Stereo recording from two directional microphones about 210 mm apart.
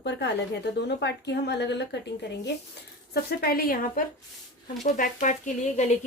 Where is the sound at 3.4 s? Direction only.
45° left (ahead or behind).